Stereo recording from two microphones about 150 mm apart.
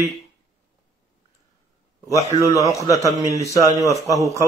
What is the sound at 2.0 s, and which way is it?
A man's voice, 20° left (ahead or behind).